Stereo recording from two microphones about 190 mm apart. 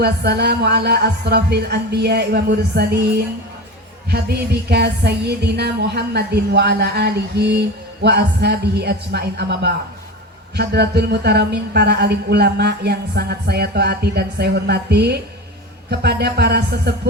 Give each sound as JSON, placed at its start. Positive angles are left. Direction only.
{"t": 0.0, "sound": "music", "side_deg": -60}
{"t": 4.1, "sound": "music", "side_deg": -60}